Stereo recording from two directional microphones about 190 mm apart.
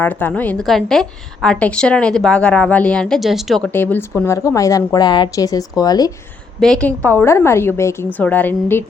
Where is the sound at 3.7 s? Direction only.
10° left (ahead or behind).